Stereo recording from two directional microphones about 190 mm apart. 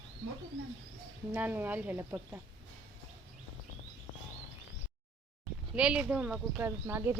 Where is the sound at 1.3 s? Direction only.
10° right (ahead or behind).